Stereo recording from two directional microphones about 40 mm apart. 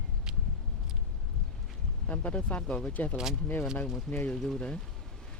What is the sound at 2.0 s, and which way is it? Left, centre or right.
Speech, left.